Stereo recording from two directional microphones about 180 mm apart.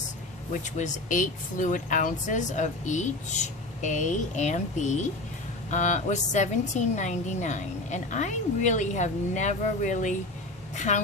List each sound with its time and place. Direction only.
0.6 s a woman's voice: 45° left (ahead or behind)